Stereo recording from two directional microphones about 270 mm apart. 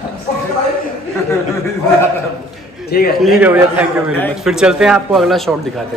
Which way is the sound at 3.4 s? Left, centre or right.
Centre.